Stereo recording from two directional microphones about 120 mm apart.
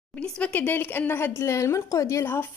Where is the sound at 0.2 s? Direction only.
10° left (ahead or behind).